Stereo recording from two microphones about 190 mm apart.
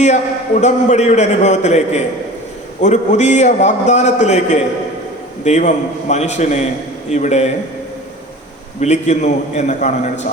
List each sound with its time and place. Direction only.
0.0 s a man's voice: 35° left (ahead or behind)
8.8 s a man's voice: 35° left (ahead or behind)